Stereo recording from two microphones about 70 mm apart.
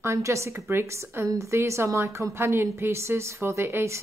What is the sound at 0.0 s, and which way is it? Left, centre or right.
A woman's voice, right.